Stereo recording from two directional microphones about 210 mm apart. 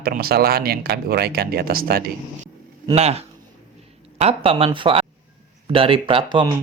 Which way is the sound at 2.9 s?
30° right (ahead or behind).